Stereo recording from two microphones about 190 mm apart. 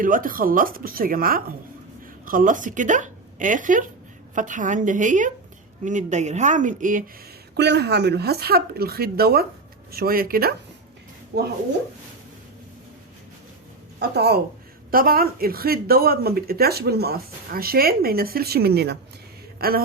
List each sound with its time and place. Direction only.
0.0 s speech: 45° right (ahead or behind)
7.5 s speech: 60° right (ahead or behind)
11.3 s speech: 60° right (ahead or behind)
14.0 s speech: 60° right (ahead or behind)